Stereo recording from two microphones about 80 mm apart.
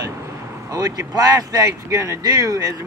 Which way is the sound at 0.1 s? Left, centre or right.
Right.